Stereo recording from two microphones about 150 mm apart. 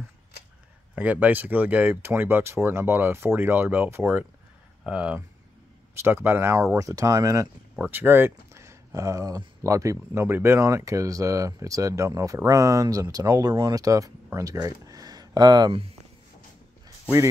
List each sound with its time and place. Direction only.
0.9 s speech: 10° right (ahead or behind)
7.7 s speech: 15° right (ahead or behind); by 15.9 s 30° right (ahead or behind)